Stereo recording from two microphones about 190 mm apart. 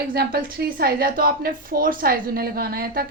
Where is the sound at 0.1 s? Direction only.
50° right (ahead or behind).